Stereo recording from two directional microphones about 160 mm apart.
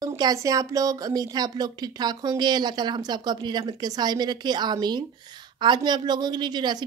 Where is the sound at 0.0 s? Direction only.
25° right (ahead or behind).